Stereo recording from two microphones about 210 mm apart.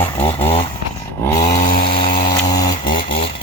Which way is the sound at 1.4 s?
35° left (ahead or behind).